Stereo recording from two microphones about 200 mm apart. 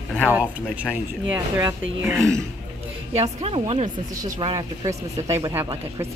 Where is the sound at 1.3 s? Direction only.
15° right (ahead or behind).